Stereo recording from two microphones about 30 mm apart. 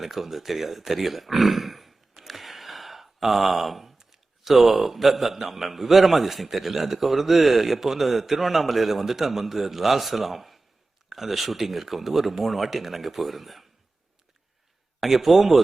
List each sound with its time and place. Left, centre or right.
0.0 s speech: centre
2.1 s a sound: centre
11.1 s speech: centre
15.0 s speech: centre